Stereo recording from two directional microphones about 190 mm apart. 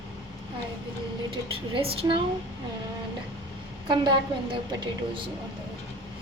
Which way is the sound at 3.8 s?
25° right (ahead or behind).